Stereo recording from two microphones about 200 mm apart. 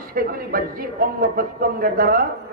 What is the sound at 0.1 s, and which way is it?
Speech, 45° right (ahead or behind).